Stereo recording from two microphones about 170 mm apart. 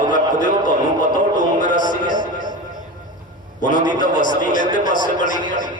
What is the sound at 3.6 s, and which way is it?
A man's voice, 50° left (ahead or behind).